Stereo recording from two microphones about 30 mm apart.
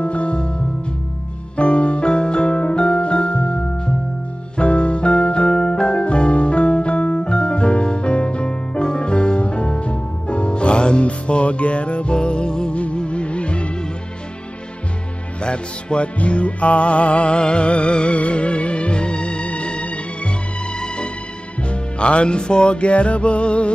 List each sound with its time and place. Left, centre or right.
0.0 s music: left
1.6 s music: left
5.5 s music: left
15.4 s music: left